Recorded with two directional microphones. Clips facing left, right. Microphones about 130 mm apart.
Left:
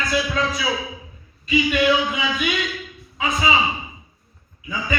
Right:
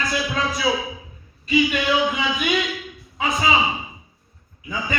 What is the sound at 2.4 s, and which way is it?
Speech, 25° right (ahead or behind).